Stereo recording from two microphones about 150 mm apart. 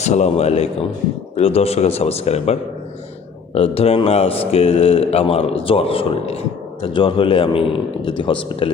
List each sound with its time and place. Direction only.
0.0 s a man's voice: 50° left (ahead or behind)